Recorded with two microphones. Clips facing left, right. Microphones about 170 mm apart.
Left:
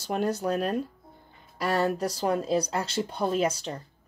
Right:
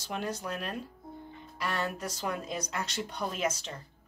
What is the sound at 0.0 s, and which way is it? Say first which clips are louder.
Speech: left 8 dB; 40° left (ahead or behind).